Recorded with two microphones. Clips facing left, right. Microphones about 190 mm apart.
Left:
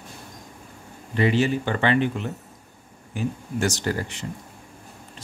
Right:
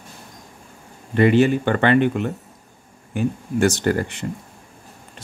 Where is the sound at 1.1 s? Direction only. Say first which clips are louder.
Right 6 dB; 55° right (ahead or behind).